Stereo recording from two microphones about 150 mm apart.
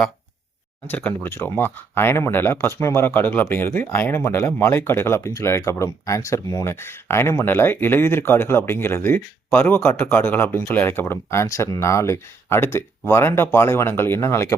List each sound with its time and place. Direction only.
0.9 s speech: 10° left (ahead or behind)